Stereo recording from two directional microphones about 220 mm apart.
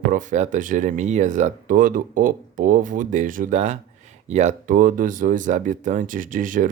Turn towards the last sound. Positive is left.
turn(degrees=-35)  # may be behind; listen again after turning